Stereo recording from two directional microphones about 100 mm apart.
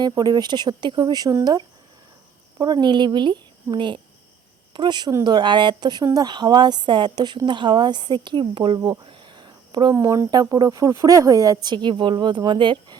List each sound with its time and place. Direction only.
0.2 s a woman's voice: 45° right (ahead or behind); by 8.8 s 60° right (ahead or behind)
8.8 s a sound: 55° right (ahead or behind)
10.0 s speech: 35° right (ahead or behind)
11.5 s a woman's voice: 50° right (ahead or behind)